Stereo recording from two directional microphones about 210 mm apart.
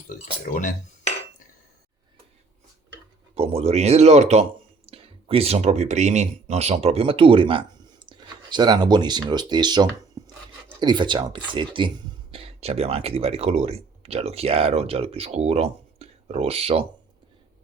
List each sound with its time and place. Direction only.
0.1 s speech: 40° left (ahead or behind)
3.3 s speech: 30° right (ahead or behind)